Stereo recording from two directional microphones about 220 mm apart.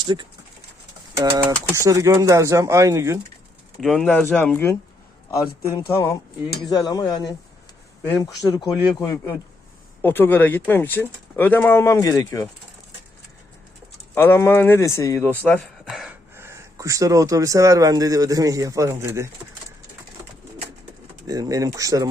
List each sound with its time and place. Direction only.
0.0 s speech: 20° right (ahead or behind)
3.8 s speech: 5° left (ahead or behind)
6.7 s speech: 15° left (ahead or behind)
14.2 s speech: 10° left (ahead or behind)
16.3 s speech: 10° right (ahead or behind)
21.2 s speech: 15° right (ahead or behind)